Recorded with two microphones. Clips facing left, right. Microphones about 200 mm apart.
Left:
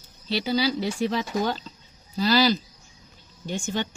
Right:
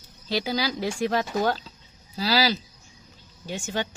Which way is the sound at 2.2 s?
10° right (ahead or behind).